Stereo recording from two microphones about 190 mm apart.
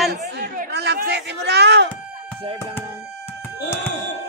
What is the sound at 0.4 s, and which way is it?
Speech, 60° right (ahead or behind).